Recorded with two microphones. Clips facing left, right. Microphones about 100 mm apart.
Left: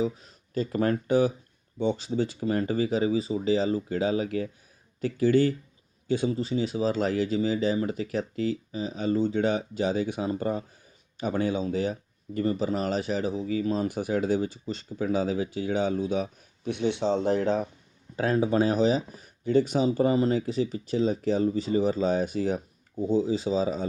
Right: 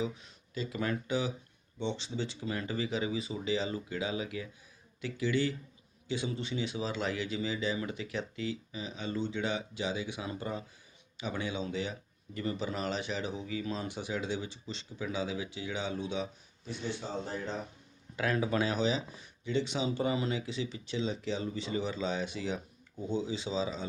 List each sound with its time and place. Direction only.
0.0 s speech: 40° left (ahead or behind); by 17.7 s 70° left (ahead or behind)
18.2 s speech: 30° left (ahead or behind)